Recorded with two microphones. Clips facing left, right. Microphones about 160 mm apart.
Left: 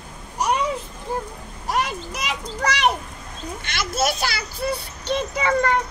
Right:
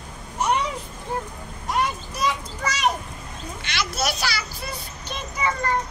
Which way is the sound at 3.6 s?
50° left (ahead or behind).